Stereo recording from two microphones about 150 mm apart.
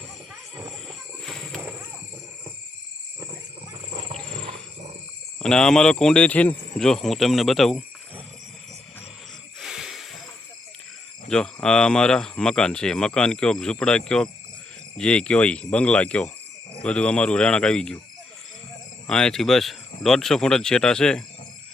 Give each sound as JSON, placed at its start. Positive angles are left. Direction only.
{"t": 0.9, "sound": "a sound", "side_deg": 5}
{"t": 3.9, "sound": "wild animals", "side_deg": -40}
{"t": 5.4, "sound": "speech", "side_deg": 5}
{"t": 9.6, "sound": "a sound", "side_deg": -5}
{"t": 11.3, "sound": "speech", "side_deg": 5}
{"t": 19.0, "sound": "speech", "side_deg": 5}